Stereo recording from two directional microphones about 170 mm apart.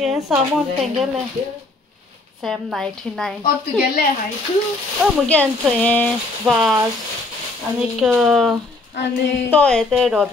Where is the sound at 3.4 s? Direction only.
60° left (ahead or behind).